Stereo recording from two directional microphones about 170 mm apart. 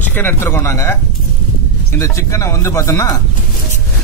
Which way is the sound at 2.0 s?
15° left (ahead or behind).